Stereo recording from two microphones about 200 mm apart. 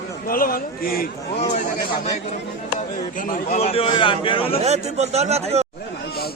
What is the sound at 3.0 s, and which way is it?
A man's voice, 45° left (ahead or behind).